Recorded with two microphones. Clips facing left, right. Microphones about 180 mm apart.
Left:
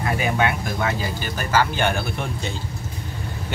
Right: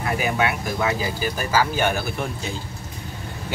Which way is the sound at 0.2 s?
5° right (ahead or behind).